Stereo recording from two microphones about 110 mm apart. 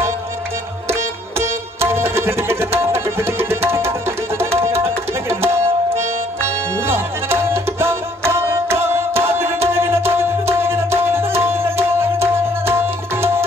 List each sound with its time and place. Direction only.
1.8 s music: 25° right (ahead or behind)